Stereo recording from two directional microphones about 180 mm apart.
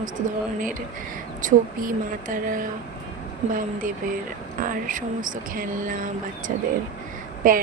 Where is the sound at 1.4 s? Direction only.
45° right (ahead or behind).